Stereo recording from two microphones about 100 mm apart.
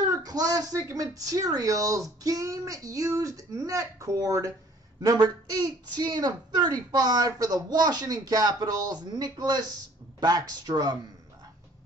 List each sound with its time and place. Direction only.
0.1 s a woman's voice: 40° right (ahead or behind)